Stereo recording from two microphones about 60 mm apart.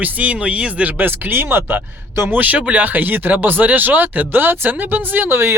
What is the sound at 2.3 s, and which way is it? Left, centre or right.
Speech, right.